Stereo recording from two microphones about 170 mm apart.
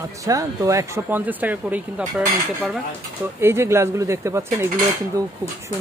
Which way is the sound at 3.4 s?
15° right (ahead or behind).